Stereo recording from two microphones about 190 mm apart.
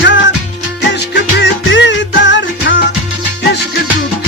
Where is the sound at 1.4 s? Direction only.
75° left (ahead or behind).